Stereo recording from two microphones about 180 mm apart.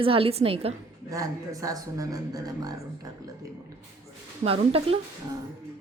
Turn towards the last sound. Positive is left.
turn(degrees=-30)  # may be behind; listen again after turning